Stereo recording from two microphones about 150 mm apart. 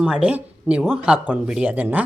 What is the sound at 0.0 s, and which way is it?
Speech, 5° right (ahead or behind).